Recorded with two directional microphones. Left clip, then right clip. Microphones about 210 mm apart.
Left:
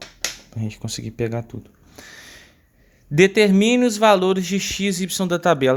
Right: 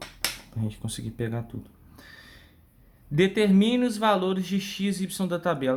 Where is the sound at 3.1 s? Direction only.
35° left (ahead or behind).